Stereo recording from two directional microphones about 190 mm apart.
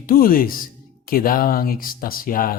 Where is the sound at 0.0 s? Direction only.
50° left (ahead or behind).